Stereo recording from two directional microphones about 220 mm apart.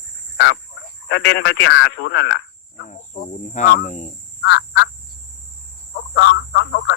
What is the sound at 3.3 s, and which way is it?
Speech, 35° left (ahead or behind).